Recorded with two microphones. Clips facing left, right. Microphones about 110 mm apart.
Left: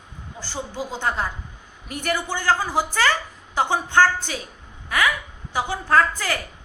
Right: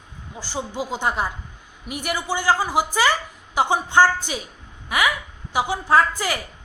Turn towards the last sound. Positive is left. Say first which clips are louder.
# right 1 dB
turn(degrees=-15)  # may be behind; listen again after turning